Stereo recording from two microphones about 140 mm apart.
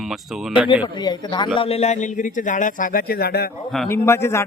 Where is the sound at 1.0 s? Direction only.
30° left (ahead or behind).